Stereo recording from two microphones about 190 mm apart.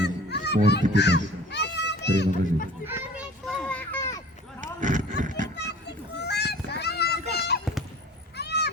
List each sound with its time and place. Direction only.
0.0 s children playing: 60° left (ahead or behind)
0.9 s crow: 65° left (ahead or behind)
2.8 s children playing: 10° right (ahead or behind)
3.4 s children playing: 5° left (ahead or behind)
4.8 s a sound: 40° right (ahead or behind)
5.5 s a sound: 60° left (ahead or behind)